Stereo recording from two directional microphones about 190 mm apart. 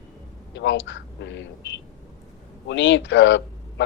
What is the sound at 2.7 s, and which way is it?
Speech, 75° left (ahead or behind).